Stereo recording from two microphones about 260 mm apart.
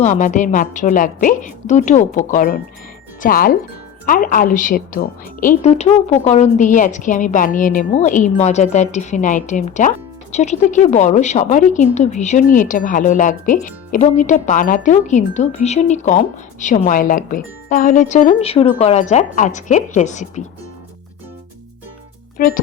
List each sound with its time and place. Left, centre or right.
0.0 s a woman's voice: left
22.4 s speech: left